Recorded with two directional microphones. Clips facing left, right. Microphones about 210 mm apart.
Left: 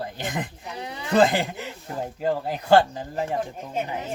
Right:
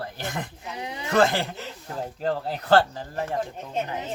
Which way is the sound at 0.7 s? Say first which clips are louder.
Right 1 dB; 15° right (ahead or behind).